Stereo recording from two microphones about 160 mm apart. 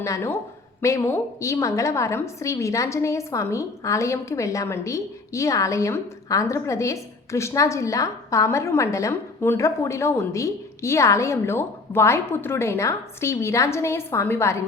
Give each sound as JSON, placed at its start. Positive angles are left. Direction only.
{"t": 0.0, "sound": "a woman's voice", "side_deg": 15}